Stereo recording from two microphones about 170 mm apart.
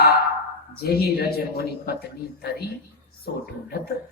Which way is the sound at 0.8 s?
65° left (ahead or behind).